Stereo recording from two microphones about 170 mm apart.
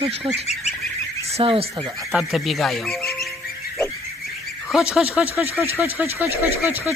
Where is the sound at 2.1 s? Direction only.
Centre (ahead or behind).